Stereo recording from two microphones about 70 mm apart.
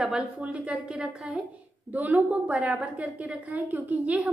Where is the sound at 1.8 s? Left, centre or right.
Right.